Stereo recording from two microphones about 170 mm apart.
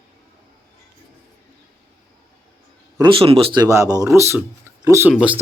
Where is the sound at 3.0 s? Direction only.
30° right (ahead or behind).